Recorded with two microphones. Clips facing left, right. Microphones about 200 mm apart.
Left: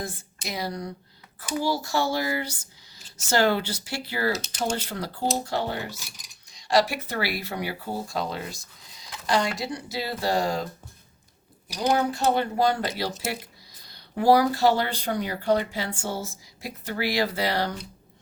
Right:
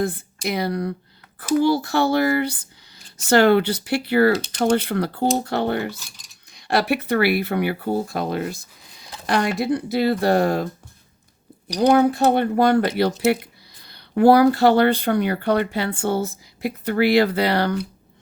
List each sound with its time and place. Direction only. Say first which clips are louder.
0.0 s speech: right 11 dB; 60° right (ahead or behind)
11.8 s speech: right 8 dB; 60° right (ahead or behind)